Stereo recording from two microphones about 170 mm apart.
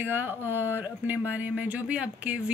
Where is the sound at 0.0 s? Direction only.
10° right (ahead or behind).